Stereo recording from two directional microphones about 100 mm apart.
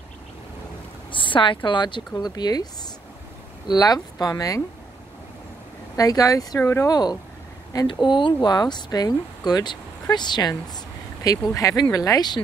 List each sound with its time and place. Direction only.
1.1 s speech: 55° left (ahead or behind); by 4.6 s 35° left (ahead or behind)
5.9 s speech: 35° left (ahead or behind)
6.6 s speech: 25° left (ahead or behind)
6.9 s speech: 45° left (ahead or behind)
11.2 s speech: 35° left (ahead or behind)